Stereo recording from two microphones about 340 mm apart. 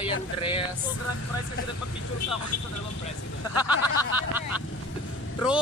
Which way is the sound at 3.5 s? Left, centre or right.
Centre.